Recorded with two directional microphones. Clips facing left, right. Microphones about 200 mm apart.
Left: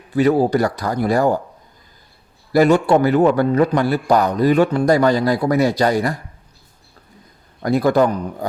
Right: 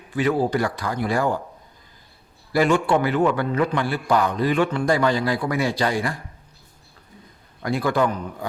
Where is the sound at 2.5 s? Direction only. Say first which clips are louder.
Left 5 dB; 40° left (ahead or behind).